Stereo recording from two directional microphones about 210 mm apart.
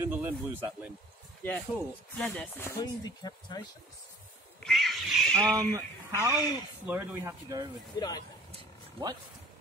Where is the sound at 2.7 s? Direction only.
20° left (ahead or behind).